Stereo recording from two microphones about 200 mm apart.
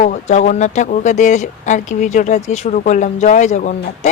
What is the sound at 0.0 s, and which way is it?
Speech, 35° left (ahead or behind).